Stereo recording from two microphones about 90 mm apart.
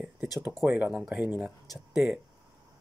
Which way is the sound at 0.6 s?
20° right (ahead or behind).